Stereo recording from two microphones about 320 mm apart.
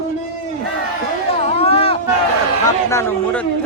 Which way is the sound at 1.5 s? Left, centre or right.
Centre.